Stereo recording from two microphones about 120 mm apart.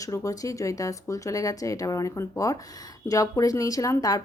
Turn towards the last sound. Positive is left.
turn(degrees=25)  # may be behind; listen again after turning